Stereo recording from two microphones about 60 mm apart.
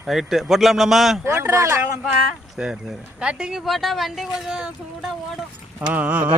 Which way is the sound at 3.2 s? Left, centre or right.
Centre.